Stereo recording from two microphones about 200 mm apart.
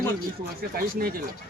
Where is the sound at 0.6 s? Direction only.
45° right (ahead or behind).